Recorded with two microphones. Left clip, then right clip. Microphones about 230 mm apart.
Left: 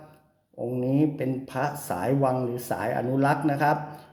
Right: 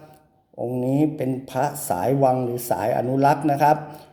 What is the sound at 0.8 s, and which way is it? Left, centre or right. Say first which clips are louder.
Speech: right 3 dB; centre.